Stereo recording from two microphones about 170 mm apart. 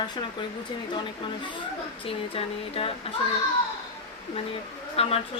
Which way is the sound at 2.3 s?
35° left (ahead or behind).